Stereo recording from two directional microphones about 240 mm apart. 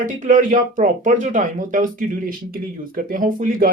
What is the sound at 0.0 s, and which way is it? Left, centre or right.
Speech, right.